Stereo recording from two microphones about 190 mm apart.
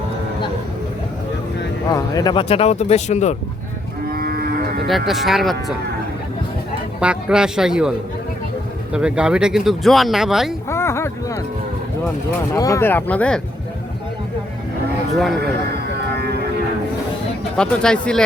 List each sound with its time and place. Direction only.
1.9 s speech: 20° left (ahead or behind); by 3.3 s 35° left (ahead or behind)
4.1 s cattle: 50° right (ahead or behind)
4.9 s speech: centre (ahead or behind)
7.0 s speech: 5° right (ahead or behind)
10.7 s a sound: 15° left (ahead or behind)
12.5 s speech: 15° left (ahead or behind)
16.1 s a sound: 60° right (ahead or behind)
17.6 s speech: 5° left (ahead or behind)